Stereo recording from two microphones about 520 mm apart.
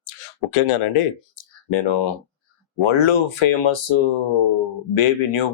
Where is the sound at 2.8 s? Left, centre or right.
Left.